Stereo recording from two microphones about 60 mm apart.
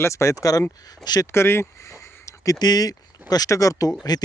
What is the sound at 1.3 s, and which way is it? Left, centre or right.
Speech, left.